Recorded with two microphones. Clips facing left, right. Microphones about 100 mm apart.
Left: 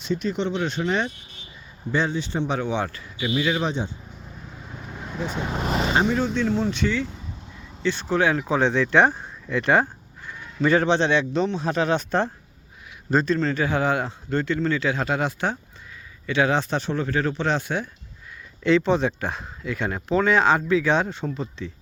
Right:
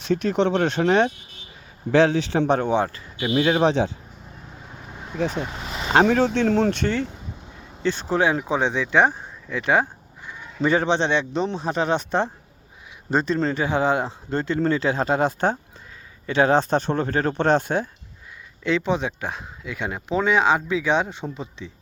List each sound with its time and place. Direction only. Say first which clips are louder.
0.1 s speech: right 5 dB; 70° right (ahead or behind)
1.9 s a man's voice: right 7 dB; 90° right
2.5 s speech: right 6 dB; 45° right (ahead or behind)
3.3 s speech: right 5 dB; 50° right (ahead or behind)
3.7 s a man's voice: right 7 dB; 90° right
4.9 s vehicle: left 2 dB; 5° right (ahead or behind)
5.5 s vehicle: left 8 dB; 50° left (ahead or behind)
5.9 s speech: right 7 dB; 70° right (ahead or behind); by 7.1 s 55° right (ahead or behind)
7.8 s speech: right 1 dB; 40° right (ahead or behind)
8.1 s speech: even; 30° right (ahead or behind)
8.4 s speech: left 2 dB; 15° right (ahead or behind); by 17.8 s 45° right (ahead or behind)
18.6 s speech: left 3 dB; 10° right (ahead or behind)